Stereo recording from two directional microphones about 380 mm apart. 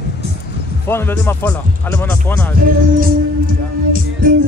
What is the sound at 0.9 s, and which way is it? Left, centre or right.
Speech, centre.